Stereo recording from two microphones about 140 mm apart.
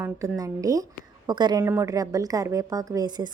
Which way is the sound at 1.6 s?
15° right (ahead or behind).